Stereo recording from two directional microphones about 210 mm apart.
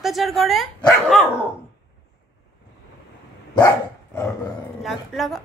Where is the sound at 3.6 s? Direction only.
15° left (ahead or behind).